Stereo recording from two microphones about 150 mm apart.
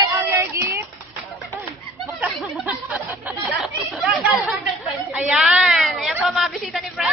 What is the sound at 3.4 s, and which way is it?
Chatter, centre (ahead or behind).